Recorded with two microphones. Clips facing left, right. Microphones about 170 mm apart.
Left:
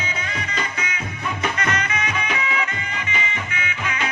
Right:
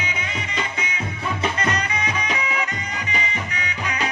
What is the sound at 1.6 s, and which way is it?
Music, 35° right (ahead or behind).